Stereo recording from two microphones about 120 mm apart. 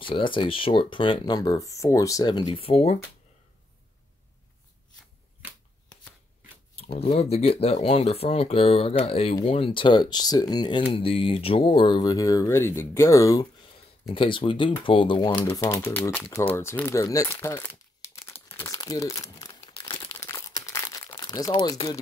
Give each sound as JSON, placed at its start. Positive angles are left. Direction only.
{"t": 0.0, "sound": "speech", "side_deg": 45}
{"t": 6.7, "sound": "a sound", "side_deg": 55}
{"t": 7.2, "sound": "speech", "side_deg": 55}
{"t": 14.1, "sound": "speech", "side_deg": 45}
{"t": 15.5, "sound": "speech", "side_deg": 25}
{"t": 18.1, "sound": "crumpling", "side_deg": 20}
{"t": 21.7, "sound": "speech", "side_deg": 25}